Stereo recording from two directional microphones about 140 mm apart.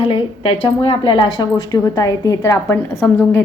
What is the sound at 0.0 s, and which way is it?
A woman's voice, 35° left (ahead or behind).